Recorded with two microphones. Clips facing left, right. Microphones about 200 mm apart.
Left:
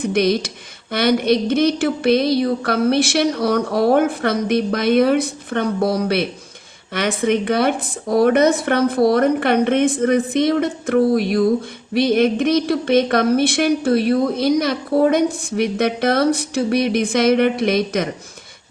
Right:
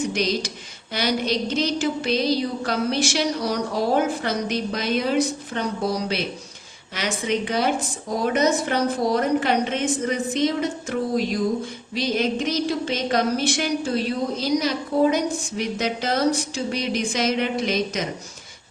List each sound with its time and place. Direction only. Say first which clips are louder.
0.0 s speech: left 6 dB; 60° left (ahead or behind)